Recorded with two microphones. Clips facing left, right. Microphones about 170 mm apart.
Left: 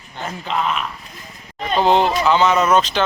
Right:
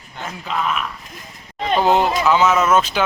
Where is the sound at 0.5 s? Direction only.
25° left (ahead or behind).